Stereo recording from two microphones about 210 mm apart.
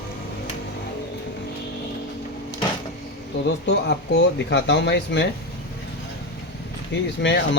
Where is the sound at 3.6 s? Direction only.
55° left (ahead or behind).